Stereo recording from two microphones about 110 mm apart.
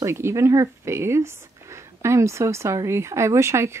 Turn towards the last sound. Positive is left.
turn(degrees=-25)  # may be behind; listen again after turning